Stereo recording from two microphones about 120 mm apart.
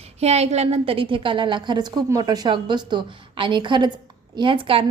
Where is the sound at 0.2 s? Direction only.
65° right (ahead or behind).